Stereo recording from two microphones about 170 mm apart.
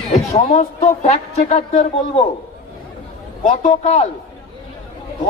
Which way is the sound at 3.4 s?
45° left (ahead or behind).